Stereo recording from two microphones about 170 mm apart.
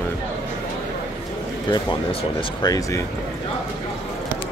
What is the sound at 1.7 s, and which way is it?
Speech, 30° left (ahead or behind).